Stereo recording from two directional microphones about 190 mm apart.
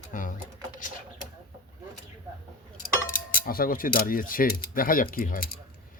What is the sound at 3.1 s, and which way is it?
Mechanisms, 45° left (ahead or behind).